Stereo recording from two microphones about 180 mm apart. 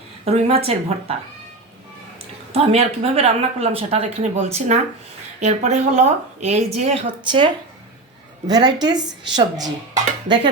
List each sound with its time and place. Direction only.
0.3 s speech: 35° right (ahead or behind)
2.5 s speech: 35° right (ahead or behind)
8.4 s speech: 25° right (ahead or behind)